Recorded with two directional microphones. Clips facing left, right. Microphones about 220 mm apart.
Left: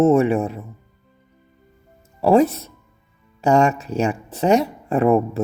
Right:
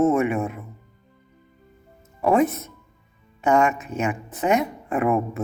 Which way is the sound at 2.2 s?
30° left (ahead or behind).